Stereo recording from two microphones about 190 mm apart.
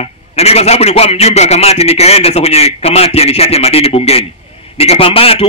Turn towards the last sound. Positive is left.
turn(degrees=30)  # may be behind; listen again after turning